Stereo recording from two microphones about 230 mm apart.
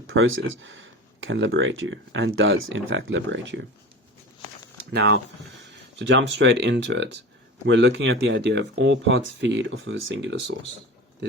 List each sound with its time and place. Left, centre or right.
0.1 s speech: right
4.8 s speech: right